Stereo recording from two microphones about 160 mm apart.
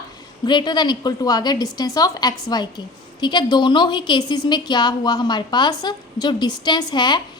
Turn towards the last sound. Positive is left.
turn(degrees=25)  # may be behind; listen again after turning